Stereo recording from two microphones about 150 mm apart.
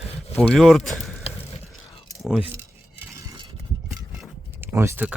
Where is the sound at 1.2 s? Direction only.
40° left (ahead or behind).